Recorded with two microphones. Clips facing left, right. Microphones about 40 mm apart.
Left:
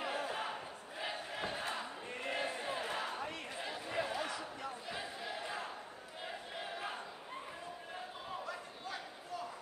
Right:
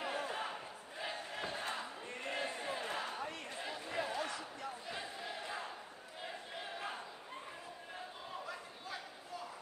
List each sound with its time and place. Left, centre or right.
0.0 s battle cry: centre
6.2 s crowd: centre
8.5 s a sound: centre